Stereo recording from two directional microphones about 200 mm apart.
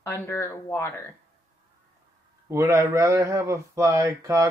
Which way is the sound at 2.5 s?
15° right (ahead or behind).